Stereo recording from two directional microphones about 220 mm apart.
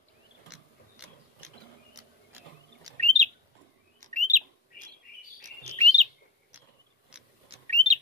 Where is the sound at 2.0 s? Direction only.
15° right (ahead or behind).